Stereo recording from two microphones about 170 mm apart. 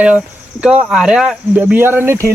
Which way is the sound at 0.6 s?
5° right (ahead or behind).